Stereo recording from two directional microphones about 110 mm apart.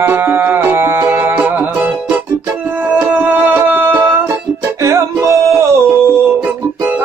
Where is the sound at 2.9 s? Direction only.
15° right (ahead or behind).